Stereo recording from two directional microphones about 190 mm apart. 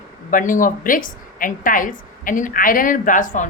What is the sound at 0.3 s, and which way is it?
A woman's voice, 45° left (ahead or behind).